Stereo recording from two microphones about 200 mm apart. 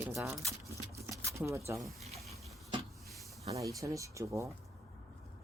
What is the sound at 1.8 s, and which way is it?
Speech, centre (ahead or behind).